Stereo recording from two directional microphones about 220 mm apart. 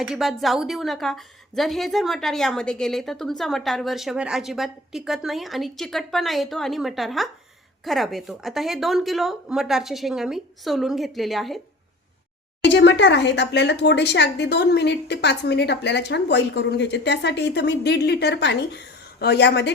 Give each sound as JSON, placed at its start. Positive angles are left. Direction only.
{"t": 0.0, "sound": "a woman's voice", "side_deg": 0}
{"t": 12.6, "sound": "speech", "side_deg": 55}